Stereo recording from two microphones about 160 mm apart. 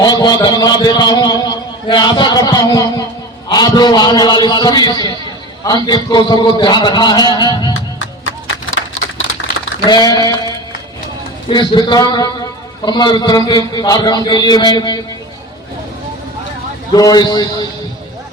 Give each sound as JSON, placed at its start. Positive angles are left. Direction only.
{"t": 0.0, "sound": "a man's voice", "side_deg": 25}
{"t": 9.8, "sound": "a man's voice", "side_deg": 25}
{"t": 16.9, "sound": "a man's voice", "side_deg": 25}